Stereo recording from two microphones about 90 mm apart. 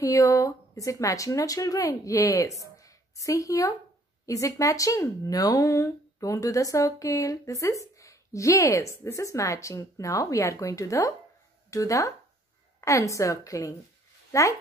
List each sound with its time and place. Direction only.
0.0 s speech: 35° left (ahead or behind)